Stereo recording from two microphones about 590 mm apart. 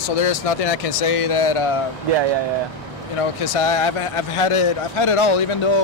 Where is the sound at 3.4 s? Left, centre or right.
Left.